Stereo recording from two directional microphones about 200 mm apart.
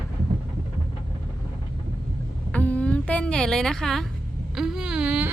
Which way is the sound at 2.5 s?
5° left (ahead or behind).